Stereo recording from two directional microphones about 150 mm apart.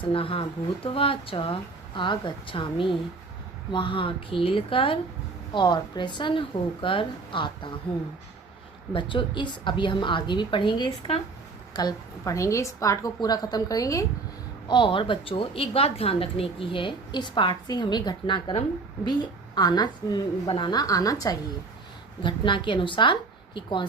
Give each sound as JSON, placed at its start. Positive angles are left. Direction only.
{"t": 0.1, "sound": "a woman's voice", "side_deg": 40}
{"t": 8.9, "sound": "a woman's voice", "side_deg": 35}
{"t": 14.7, "sound": "a woman's voice", "side_deg": 35}